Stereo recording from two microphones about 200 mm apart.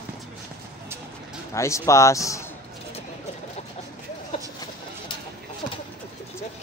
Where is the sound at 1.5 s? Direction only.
15° left (ahead or behind).